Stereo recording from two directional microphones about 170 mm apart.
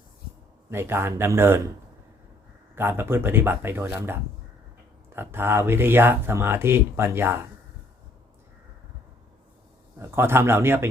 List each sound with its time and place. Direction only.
0.7 s speech: 15° right (ahead or behind)
2.7 s speech: 15° right (ahead or behind)
10.0 s speech: 15° right (ahead or behind)